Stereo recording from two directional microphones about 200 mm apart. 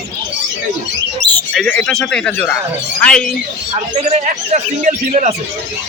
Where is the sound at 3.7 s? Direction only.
35° right (ahead or behind).